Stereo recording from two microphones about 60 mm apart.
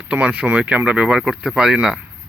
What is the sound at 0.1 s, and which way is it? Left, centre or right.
Speech, right.